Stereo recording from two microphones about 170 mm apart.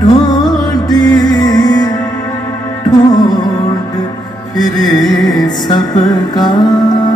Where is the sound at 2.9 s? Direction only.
25° left (ahead or behind).